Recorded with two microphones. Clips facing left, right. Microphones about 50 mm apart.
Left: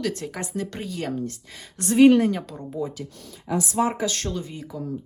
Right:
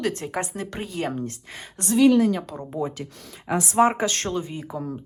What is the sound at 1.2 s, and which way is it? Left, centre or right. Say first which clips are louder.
Speech: even; right.